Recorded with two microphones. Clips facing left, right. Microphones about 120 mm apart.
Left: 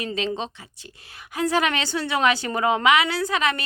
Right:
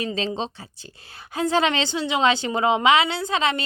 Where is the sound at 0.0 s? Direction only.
30° right (ahead or behind).